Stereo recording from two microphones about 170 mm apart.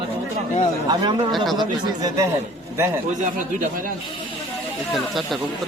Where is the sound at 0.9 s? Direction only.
25° right (ahead or behind).